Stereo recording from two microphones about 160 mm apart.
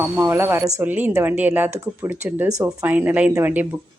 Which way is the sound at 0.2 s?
15° right (ahead or behind).